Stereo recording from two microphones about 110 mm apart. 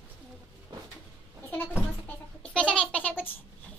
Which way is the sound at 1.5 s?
20° left (ahead or behind).